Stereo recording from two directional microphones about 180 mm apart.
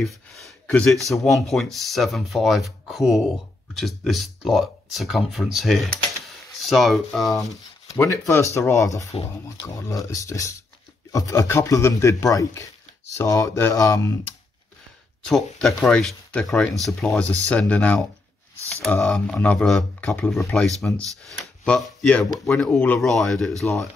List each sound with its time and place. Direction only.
0.4 s speech: 5° left (ahead or behind)
7.9 s speech: 15° left (ahead or behind)
15.2 s speech: centre (ahead or behind)